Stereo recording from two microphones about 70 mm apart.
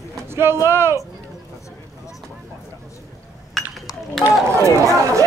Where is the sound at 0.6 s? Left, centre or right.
Right.